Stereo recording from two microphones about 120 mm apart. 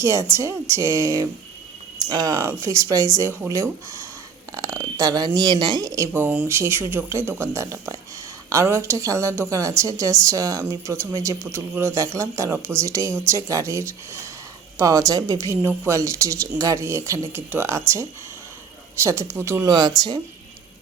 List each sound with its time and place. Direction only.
0.0 s speech: 25° right (ahead or behind)
19.0 s speech: 20° right (ahead or behind)
19.7 s speech: 35° right (ahead or behind)